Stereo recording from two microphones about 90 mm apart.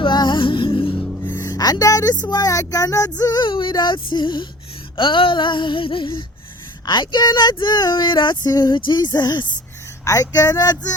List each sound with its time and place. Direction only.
0.0 s music: 55° left (ahead or behind)
0.9 s music: 5° left (ahead or behind)
1.2 s music: 35° left (ahead or behind)
2.3 s speech: 40° left (ahead or behind)
3.5 s a sound: 60° left (ahead or behind)
6.8 s speech: 55° left (ahead or behind)
10.0 s speech: 40° left (ahead or behind)